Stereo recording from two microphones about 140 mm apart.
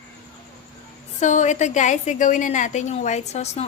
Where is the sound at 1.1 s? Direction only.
60° left (ahead or behind).